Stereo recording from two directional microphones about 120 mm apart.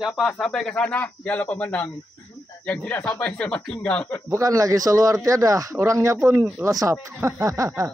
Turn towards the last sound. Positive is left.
turn(degrees=-25)  # may be behind; listen again after turning